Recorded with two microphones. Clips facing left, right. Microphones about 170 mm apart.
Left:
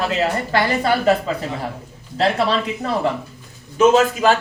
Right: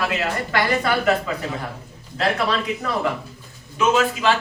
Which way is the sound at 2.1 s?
30° left (ahead or behind).